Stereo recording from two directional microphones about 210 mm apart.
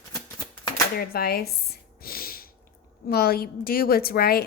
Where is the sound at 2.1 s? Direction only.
45° left (ahead or behind).